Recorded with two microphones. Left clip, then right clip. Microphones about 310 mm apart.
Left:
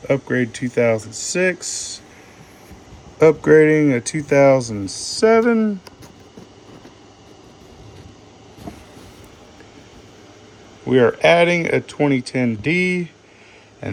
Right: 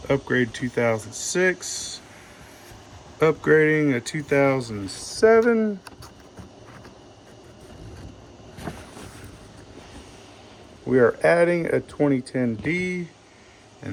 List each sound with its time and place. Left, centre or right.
0.1 s speech: centre
3.2 s speech: centre
5.2 s speech: left
10.8 s speech: left
12.5 s speech: centre